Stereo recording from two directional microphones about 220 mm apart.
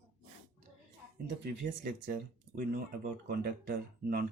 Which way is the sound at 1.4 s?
45° right (ahead or behind).